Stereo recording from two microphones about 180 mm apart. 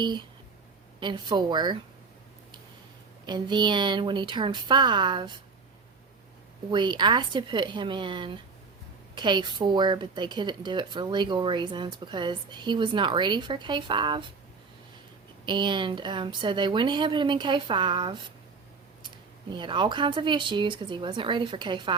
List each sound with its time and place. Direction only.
0.0 s speech: 25° right (ahead or behind)
3.2 s speech: 25° right (ahead or behind)
6.7 s speech: 25° right (ahead or behind)
15.4 s speech: 25° right (ahead or behind)